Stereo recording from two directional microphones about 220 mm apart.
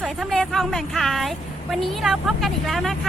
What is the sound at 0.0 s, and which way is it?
Speech, centre (ahead or behind).